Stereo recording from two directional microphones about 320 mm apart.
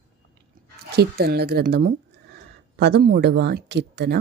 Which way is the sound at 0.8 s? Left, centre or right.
Right.